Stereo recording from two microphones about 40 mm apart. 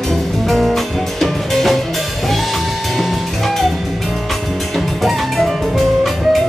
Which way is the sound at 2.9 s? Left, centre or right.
Centre.